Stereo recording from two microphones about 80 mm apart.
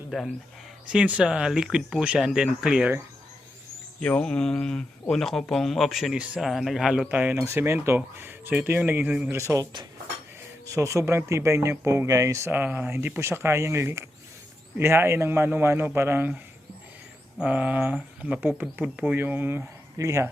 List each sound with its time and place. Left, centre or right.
0.1 s speech: centre
4.0 s speech: centre
7.1 s speech: right
7.4 s speech: right
9.3 s speech: right
10.7 s speech: right
12.0 s speech: right
12.5 s speech: right
17.4 s speech: centre
20.0 s speech: right